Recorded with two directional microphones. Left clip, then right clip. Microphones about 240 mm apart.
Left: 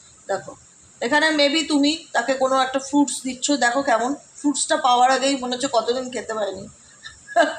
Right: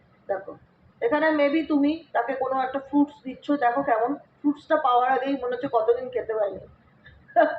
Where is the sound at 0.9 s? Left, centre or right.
Left.